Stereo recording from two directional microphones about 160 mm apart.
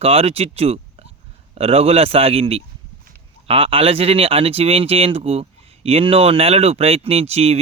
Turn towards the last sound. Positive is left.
turn(degrees=-40)  # may be behind; listen again after turning